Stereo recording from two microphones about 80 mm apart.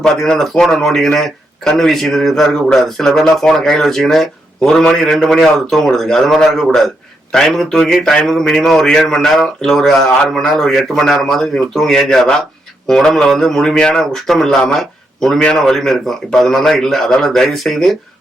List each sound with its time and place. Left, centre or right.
0.0 s speech: centre